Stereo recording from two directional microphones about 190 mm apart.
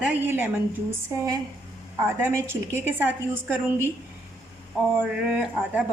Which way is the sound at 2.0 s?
15° right (ahead or behind).